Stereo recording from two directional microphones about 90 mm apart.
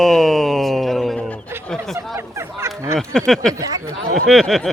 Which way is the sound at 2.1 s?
30° right (ahead or behind).